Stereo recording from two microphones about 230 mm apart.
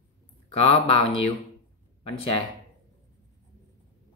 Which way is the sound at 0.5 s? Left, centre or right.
Left.